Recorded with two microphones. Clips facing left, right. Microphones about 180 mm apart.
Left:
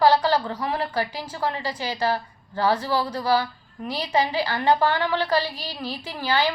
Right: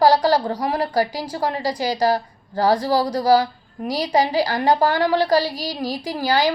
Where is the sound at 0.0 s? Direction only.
40° right (ahead or behind).